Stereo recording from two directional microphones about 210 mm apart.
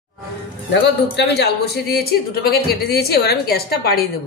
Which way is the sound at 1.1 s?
55° left (ahead or behind).